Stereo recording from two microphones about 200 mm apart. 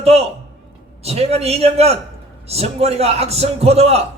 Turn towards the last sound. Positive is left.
turn(degrees=-30)  # may be behind; listen again after turning